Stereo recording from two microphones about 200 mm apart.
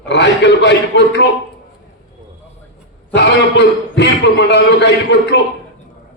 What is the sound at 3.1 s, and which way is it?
A man's voice, 60° left (ahead or behind).